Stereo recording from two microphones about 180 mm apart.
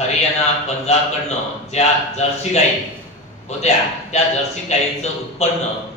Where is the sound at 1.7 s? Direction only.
35° left (ahead or behind).